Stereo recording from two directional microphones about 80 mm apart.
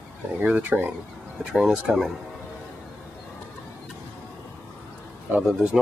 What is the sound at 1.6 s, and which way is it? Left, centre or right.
Speech, centre.